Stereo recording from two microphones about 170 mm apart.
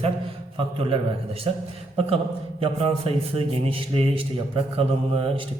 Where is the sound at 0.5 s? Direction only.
30° right (ahead or behind).